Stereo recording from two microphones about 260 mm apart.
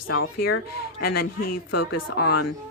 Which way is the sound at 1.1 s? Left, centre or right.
Left.